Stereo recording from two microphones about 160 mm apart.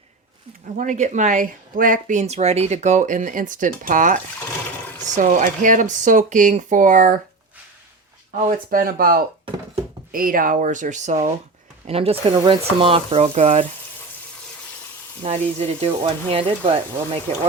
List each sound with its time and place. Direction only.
0.8 s speech: 50° right (ahead or behind)
8.4 s speech: 60° right (ahead or behind)
11.9 s speech: 35° right (ahead or behind)
15.2 s speech: 40° right (ahead or behind)